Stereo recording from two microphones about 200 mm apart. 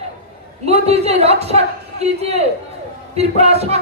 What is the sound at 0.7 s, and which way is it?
A man's voice, 30° right (ahead or behind).